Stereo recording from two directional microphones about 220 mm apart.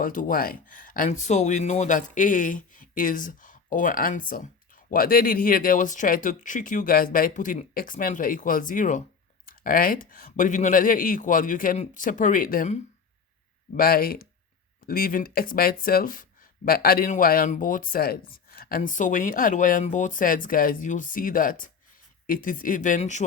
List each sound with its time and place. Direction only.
0.0 s speech: 40° left (ahead or behind)